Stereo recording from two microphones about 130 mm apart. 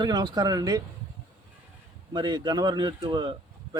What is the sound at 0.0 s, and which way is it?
Speech, 35° right (ahead or behind).